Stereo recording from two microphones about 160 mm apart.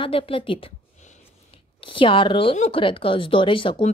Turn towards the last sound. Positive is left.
turn(degrees=30)  # may be behind; listen again after turning